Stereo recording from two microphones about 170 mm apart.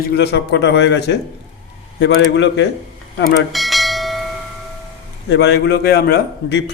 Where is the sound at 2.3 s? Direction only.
90° left.